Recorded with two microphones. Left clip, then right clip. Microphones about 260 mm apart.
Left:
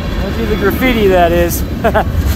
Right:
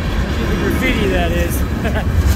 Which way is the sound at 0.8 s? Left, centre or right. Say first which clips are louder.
Left 10 dB; centre.